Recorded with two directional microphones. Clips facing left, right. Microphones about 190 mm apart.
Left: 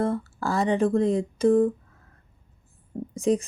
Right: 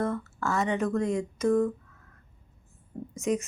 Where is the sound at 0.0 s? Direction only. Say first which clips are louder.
Left 4 dB; 30° left (ahead or behind).